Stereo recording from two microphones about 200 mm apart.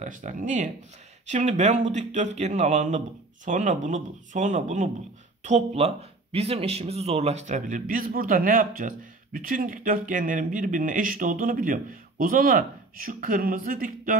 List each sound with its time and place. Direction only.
0.0 s speech: 40° right (ahead or behind)